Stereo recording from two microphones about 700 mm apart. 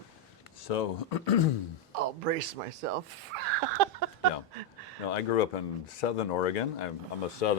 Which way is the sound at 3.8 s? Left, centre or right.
Right.